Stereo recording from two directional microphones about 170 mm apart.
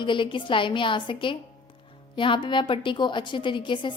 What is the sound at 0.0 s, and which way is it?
A woman's voice, 30° left (ahead or behind).